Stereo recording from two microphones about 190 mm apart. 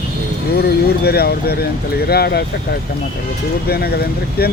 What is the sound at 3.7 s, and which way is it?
Speech, 55° left (ahead or behind).